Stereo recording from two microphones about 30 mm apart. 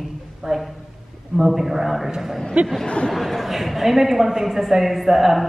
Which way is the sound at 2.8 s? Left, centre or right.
Left.